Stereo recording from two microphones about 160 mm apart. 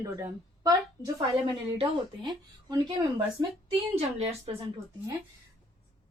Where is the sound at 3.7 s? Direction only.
40° right (ahead or behind).